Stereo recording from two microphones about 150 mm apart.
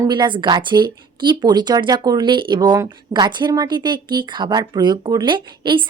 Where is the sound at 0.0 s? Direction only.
30° right (ahead or behind).